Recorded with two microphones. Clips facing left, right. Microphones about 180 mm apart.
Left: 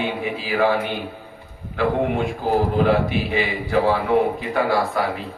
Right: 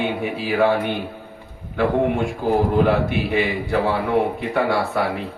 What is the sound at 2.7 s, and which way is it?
A man's voice, 60° right (ahead or behind).